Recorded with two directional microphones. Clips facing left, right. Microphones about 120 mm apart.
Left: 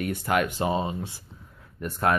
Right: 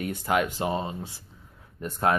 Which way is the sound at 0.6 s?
15° left (ahead or behind).